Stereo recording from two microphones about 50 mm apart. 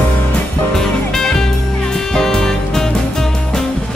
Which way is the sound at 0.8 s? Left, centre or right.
Centre.